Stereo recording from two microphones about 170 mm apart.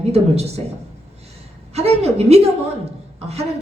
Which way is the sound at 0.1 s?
40° right (ahead or behind).